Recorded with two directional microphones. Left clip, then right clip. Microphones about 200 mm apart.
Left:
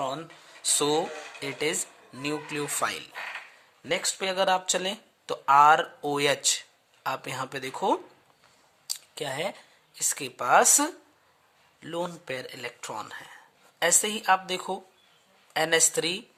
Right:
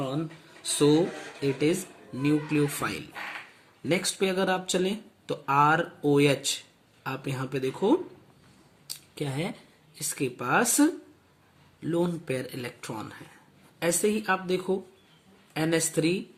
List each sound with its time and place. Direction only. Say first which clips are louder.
0.1 s speech: right 2 dB; 45° left (ahead or behind)